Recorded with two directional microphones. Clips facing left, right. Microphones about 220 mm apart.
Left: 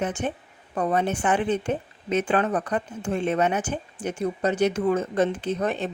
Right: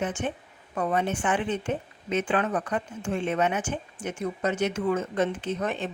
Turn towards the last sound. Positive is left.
turn(degrees=35)  # may be behind; listen again after turning